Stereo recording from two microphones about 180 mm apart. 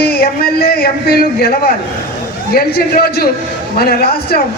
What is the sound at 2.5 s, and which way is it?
A man's voice, 60° left (ahead or behind).